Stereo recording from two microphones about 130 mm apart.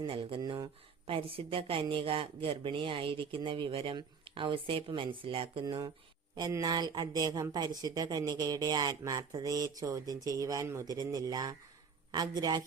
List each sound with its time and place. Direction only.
0.1 s speech: 45° right (ahead or behind)
5.6 s speech: 30° right (ahead or behind)